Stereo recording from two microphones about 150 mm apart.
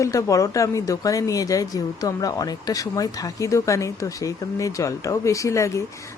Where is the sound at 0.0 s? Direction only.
20° left (ahead or behind).